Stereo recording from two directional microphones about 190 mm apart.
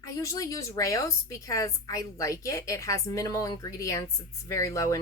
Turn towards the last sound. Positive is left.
turn(degrees=15)  # may be behind; listen again after turning